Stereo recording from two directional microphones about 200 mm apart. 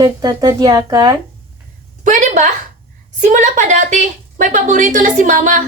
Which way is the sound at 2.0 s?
40° right (ahead or behind).